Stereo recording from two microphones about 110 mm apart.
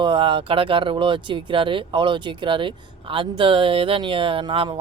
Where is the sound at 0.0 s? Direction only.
50° right (ahead or behind).